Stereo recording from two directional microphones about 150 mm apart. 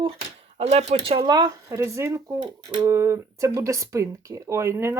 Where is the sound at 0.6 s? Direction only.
45° right (ahead or behind).